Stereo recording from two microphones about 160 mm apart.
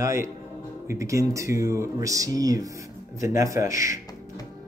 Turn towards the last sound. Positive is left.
turn(degrees=-20)  # may be behind; listen again after turning